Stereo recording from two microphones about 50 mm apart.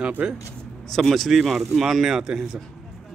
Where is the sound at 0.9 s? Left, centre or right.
Centre.